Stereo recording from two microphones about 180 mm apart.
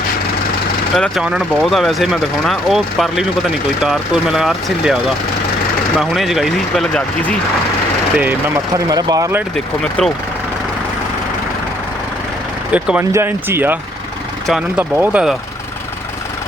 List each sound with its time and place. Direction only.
0.9 s speech: centre (ahead or behind)
8.2 s speech: 15° right (ahead or behind)
12.7 s speech: 10° right (ahead or behind)